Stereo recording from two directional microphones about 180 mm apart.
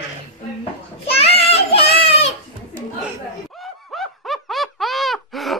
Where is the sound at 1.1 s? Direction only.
35° left (ahead or behind).